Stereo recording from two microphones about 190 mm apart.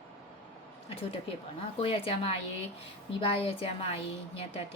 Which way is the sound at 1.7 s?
30° left (ahead or behind).